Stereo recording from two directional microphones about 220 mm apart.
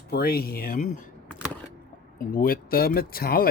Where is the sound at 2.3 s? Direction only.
40° left (ahead or behind).